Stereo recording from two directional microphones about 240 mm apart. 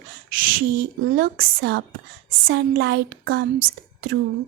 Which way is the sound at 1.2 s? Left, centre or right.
Right.